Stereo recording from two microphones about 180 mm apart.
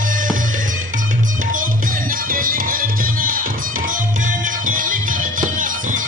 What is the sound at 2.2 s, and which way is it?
Music, 50° right (ahead or behind).